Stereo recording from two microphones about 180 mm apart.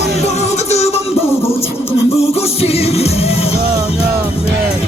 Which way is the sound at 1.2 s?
15° left (ahead or behind).